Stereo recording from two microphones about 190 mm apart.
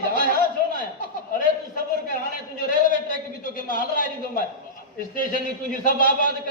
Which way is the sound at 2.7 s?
45° left (ahead or behind).